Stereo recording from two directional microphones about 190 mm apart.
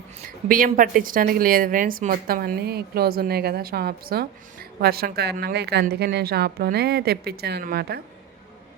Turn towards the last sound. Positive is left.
turn(degrees=-55)  # may be behind; listen again after turning